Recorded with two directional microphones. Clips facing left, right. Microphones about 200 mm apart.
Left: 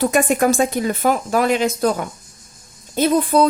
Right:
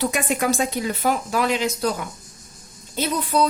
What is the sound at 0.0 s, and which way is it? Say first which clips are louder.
A woman's voice: left 6 dB; 45° left (ahead or behind).